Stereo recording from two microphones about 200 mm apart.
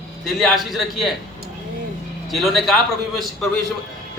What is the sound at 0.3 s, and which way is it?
Speech, centre (ahead or behind).